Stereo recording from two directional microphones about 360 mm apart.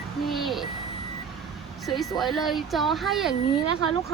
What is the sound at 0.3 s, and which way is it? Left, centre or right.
Reversing beeps, centre.